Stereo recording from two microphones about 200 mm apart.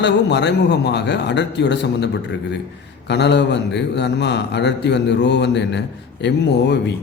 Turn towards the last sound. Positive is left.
turn(degrees=60)  # may be behind; listen again after turning